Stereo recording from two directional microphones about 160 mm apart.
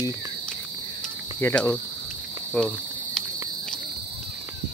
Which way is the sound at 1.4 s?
10° left (ahead or behind).